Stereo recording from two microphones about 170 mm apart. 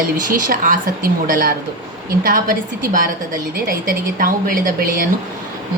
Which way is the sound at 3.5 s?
55° right (ahead or behind).